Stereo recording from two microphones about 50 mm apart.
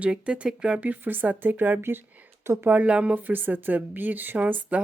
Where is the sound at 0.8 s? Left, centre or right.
Right.